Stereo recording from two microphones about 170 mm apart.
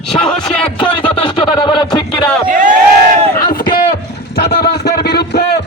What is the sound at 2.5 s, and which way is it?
Speech, 50° right (ahead or behind).